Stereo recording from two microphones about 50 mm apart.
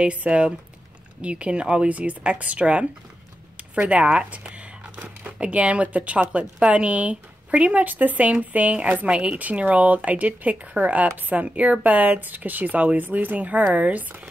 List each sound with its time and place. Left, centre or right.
0.0 s speech: right
3.9 s speech: right
4.6 s a sound: right
6.3 s speech: right